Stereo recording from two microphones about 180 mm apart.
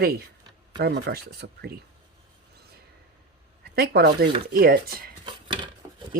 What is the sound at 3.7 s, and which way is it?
Speech, 65° right (ahead or behind).